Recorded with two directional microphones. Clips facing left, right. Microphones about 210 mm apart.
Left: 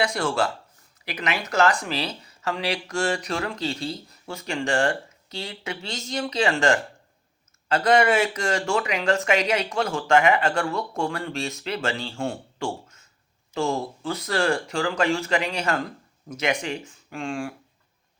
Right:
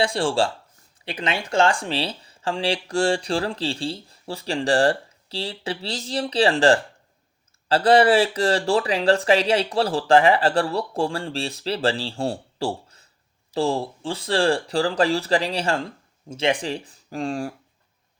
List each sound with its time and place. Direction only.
0.0 s speech: 30° right (ahead or behind)